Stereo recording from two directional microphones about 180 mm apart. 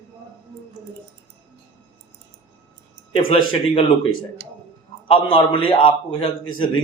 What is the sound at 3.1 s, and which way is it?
Speech, 30° left (ahead or behind).